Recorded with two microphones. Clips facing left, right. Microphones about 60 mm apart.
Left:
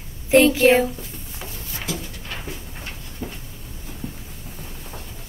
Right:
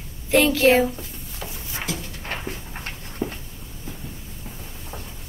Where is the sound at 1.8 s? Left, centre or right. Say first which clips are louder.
Even; right.